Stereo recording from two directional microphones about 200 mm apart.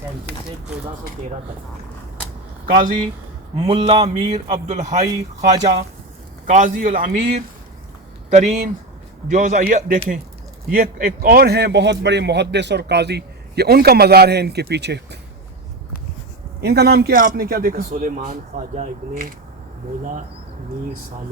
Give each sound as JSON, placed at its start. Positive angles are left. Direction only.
{"t": 3.6, "sound": "a man's voice", "side_deg": -30}
{"t": 5.5, "sound": "speech", "side_deg": -20}
{"t": 6.4, "sound": "a man's voice", "side_deg": -40}
{"t": 16.6, "sound": "a man's voice", "side_deg": -55}